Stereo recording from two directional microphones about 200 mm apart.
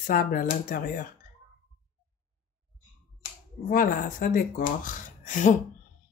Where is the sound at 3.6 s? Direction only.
45° left (ahead or behind).